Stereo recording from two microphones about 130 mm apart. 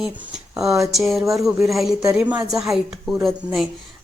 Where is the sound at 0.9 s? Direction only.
Centre (ahead or behind).